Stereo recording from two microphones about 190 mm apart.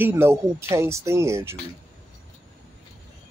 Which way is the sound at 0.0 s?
10° right (ahead or behind).